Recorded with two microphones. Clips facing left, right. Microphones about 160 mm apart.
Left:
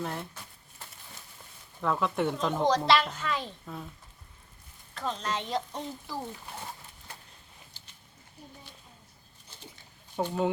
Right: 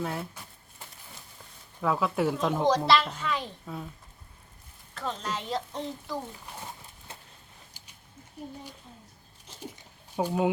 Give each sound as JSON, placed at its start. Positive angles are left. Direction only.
{"t": 0.0, "sound": "a child's voice", "side_deg": -5}
{"t": 1.8, "sound": "a child's voice", "side_deg": -5}
{"t": 4.9, "sound": "a child's voice", "side_deg": -5}
{"t": 7.1, "sound": "vehicle", "side_deg": -25}
{"t": 7.8, "sound": "a sound", "side_deg": -15}
{"t": 10.2, "sound": "speech", "side_deg": -10}